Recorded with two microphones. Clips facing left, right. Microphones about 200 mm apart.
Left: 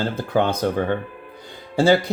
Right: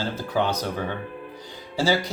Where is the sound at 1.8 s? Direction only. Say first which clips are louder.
Left 6 dB; 55° left (ahead or behind).